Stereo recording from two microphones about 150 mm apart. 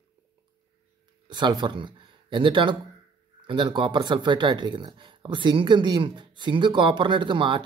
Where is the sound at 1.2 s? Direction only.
30° right (ahead or behind).